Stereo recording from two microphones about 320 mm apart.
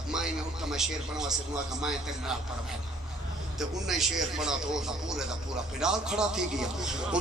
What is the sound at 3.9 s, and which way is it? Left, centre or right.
A man's voice, centre.